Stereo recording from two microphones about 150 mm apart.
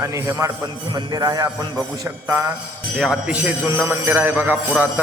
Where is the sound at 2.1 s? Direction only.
15° right (ahead or behind).